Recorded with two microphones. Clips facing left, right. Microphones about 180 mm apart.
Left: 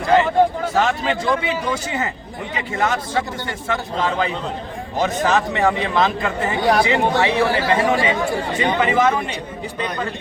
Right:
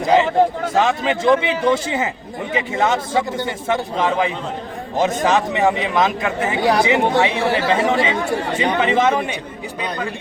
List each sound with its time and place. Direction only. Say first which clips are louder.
0.0 s a man's voice: right 1 dB; 20° right (ahead or behind)